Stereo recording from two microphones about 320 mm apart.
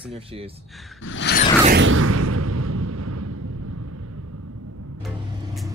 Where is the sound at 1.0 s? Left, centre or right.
Left.